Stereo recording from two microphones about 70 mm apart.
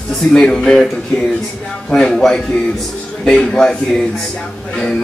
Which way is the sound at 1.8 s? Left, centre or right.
Centre.